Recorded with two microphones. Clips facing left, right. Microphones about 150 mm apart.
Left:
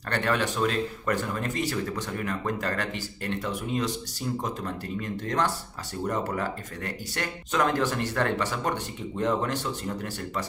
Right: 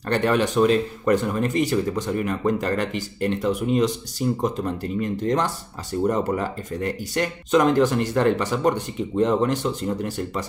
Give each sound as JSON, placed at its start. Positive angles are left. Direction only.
{"t": 0.1, "sound": "speech", "side_deg": -20}
{"t": 5.2, "sound": "speech", "side_deg": -20}